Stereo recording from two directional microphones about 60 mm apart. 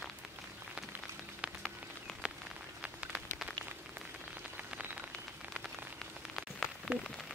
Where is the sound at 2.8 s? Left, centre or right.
Centre.